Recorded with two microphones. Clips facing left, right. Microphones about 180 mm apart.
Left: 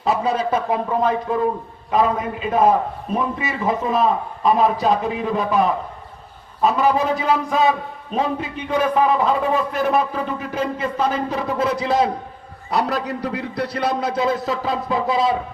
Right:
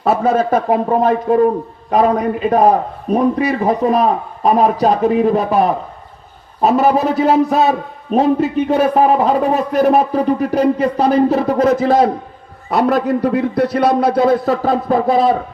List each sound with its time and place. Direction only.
0.0 s a man's voice: 55° right (ahead or behind)
12.7 s a man's voice: 60° right (ahead or behind)